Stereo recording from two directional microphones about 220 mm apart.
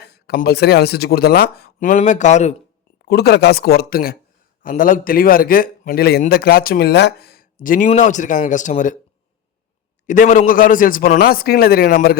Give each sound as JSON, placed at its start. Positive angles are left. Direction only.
{"t": 0.0, "sound": "speech", "side_deg": 45}
{"t": 3.1, "sound": "a man's voice", "side_deg": 50}
{"t": 10.1, "sound": "a man's voice", "side_deg": 35}